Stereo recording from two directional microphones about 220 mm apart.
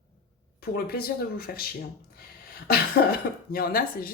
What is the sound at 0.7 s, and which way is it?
Speech, 45° left (ahead or behind).